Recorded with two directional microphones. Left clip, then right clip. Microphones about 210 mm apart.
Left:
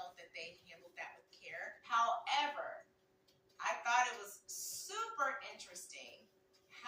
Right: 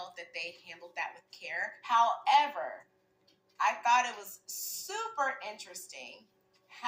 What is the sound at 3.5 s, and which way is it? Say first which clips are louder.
Speech: right 8 dB; 55° right (ahead or behind).